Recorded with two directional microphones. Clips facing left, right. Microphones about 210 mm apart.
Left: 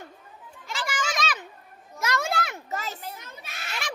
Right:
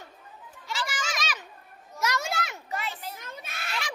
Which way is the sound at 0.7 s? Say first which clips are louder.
Left 3 dB; 50° left (ahead or behind).